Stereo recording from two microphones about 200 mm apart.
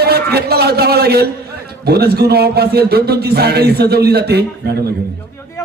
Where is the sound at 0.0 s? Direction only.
50° right (ahead or behind).